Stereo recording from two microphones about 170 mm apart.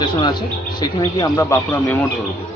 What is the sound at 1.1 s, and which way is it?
Speech, 15° left (ahead or behind).